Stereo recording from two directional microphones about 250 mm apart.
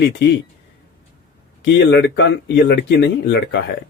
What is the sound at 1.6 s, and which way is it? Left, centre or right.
Speech, left.